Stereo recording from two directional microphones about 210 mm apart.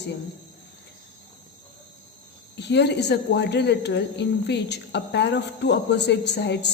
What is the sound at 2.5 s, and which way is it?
A woman's voice, 55° left (ahead or behind).